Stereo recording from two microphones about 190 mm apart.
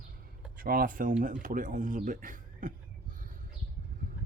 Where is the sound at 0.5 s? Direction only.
50° right (ahead or behind).